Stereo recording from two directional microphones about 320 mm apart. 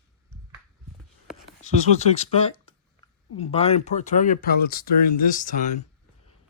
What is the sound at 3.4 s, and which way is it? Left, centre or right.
Speech, centre.